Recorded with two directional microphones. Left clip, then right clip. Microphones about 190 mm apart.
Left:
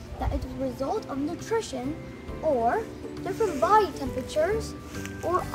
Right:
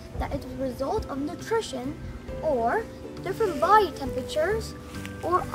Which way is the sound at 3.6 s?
5° right (ahead or behind).